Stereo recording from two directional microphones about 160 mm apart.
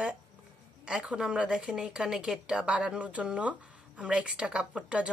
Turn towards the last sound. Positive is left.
turn(degrees=-5)  # may be behind; listen again after turning